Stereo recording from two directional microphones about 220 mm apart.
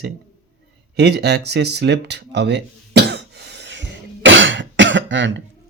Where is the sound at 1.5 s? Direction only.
50° right (ahead or behind).